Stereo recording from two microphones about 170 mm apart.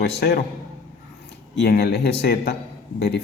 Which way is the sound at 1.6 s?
70° left (ahead or behind).